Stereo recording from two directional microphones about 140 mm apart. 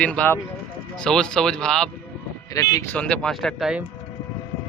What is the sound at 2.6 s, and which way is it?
Speech, 20° left (ahead or behind).